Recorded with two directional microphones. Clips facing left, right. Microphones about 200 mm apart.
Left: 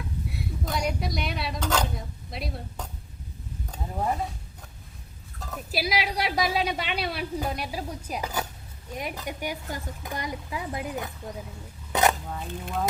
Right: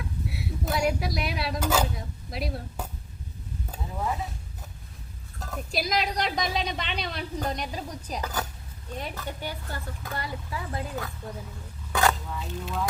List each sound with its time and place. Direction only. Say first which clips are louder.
0.3 s speech: right 2 dB; 5° right (ahead or behind)
5.4 s a woman's voice: even; 5° left (ahead or behind)
11.9 s scrape: left 1 dB; 20° left (ahead or behind)
12.3 s speech: left 1 dB; 55° left (ahead or behind)